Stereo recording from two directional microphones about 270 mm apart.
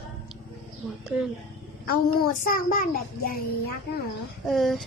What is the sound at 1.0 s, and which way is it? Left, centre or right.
Speech, centre.